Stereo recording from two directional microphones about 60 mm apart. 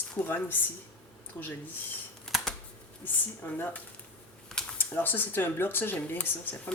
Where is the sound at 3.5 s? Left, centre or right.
Left.